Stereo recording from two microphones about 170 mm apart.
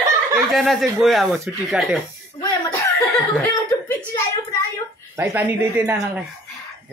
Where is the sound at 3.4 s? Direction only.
15° left (ahead or behind).